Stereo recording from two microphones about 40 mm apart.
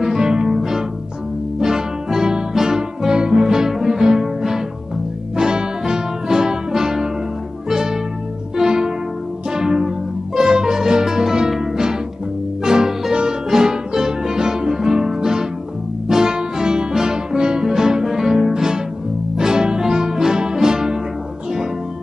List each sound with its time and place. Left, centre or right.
0.0 s music: centre